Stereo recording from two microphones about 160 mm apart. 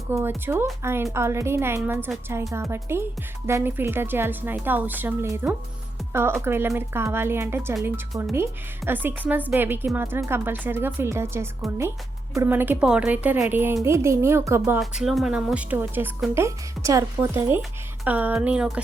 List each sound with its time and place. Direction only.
0.1 s a woman's voice: 15° right (ahead or behind)
14.8 s a woman's voice: centre (ahead or behind)